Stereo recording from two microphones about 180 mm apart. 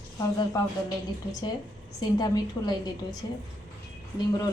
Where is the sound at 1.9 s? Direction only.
20° left (ahead or behind).